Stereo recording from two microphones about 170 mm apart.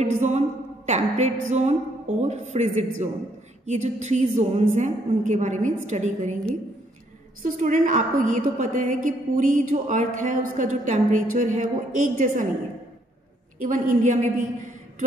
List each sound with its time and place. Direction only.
0.0 s a woman's voice: 45° right (ahead or behind)
7.4 s a woman's voice: 50° right (ahead or behind)
13.6 s a woman's voice: 50° right (ahead or behind)